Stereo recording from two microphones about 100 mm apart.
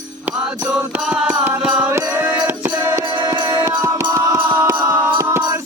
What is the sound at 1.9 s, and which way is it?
Music, 20° right (ahead or behind).